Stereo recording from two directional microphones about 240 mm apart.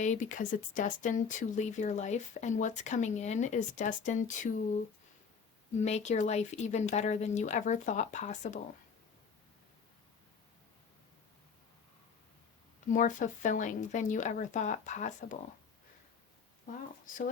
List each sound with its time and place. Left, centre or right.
0.0 s speech: left
5.8 s speech: left
12.9 s speech: left